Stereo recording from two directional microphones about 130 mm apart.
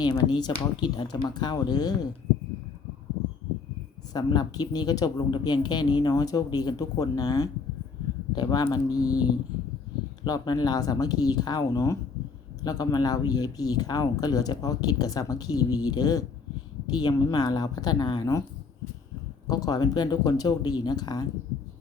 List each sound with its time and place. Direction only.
0.0 s speech: 35° left (ahead or behind)
4.1 s speech: 30° left (ahead or behind)
10.2 s speech: 30° left (ahead or behind)
19.5 s speech: 30° left (ahead or behind)